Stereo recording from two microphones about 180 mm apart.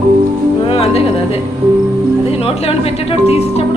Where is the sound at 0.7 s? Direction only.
30° left (ahead or behind).